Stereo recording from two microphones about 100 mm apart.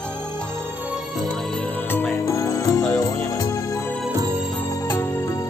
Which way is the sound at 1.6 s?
20° left (ahead or behind).